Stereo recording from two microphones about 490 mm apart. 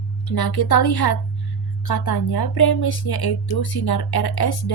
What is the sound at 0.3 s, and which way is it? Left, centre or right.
Speech, left.